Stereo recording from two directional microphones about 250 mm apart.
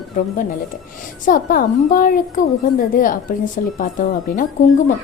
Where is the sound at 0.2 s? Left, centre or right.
Left.